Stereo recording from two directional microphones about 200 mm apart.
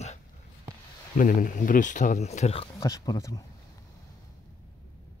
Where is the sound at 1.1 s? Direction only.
40° left (ahead or behind).